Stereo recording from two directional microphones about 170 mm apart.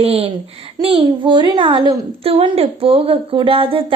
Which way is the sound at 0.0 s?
35° right (ahead or behind).